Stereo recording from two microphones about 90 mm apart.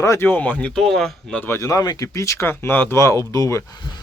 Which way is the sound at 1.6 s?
40° left (ahead or behind).